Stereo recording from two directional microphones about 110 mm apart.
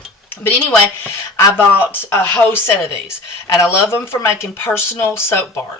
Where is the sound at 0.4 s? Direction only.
20° left (ahead or behind).